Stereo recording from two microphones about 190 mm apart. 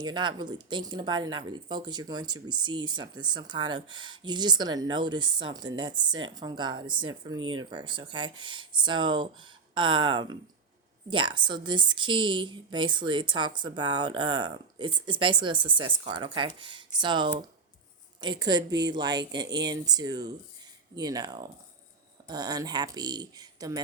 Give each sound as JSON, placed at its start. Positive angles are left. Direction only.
{"t": 0.0, "sound": "a woman's voice", "side_deg": -25}